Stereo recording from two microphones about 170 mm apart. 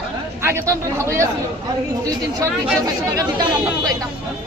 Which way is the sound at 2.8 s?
20° right (ahead or behind).